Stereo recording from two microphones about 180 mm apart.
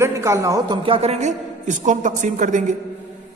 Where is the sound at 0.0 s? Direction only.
15° right (ahead or behind); by 2.7 s 45° right (ahead or behind).